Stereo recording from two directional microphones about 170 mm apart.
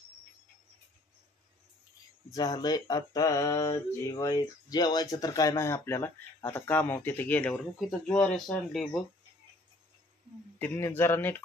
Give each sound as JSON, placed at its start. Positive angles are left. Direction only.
{"t": 2.3, "sound": "mantra", "side_deg": 25}
{"t": 10.6, "sound": "mantra", "side_deg": 10}